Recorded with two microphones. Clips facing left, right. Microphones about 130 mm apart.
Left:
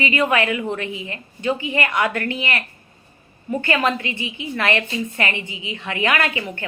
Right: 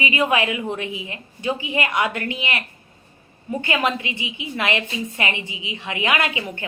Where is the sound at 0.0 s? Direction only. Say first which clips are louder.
Left 1 dB; 20° right (ahead or behind).